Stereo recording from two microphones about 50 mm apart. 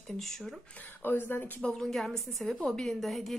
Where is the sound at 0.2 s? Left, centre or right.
Centre.